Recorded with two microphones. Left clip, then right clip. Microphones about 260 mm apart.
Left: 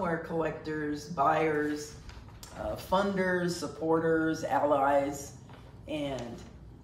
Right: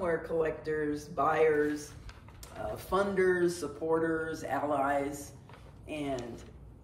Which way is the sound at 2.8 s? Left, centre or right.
Centre.